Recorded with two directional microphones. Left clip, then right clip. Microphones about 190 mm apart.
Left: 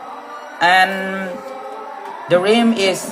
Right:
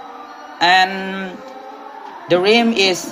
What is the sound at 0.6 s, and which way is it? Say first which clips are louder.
Speech: even; 25° right (ahead or behind).